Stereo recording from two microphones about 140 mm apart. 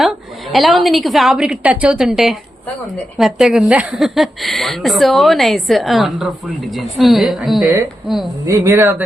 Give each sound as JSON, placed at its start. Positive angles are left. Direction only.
{"t": 0.0, "sound": "a woman's voice", "side_deg": 0}
{"t": 8.4, "sound": "speech", "side_deg": -20}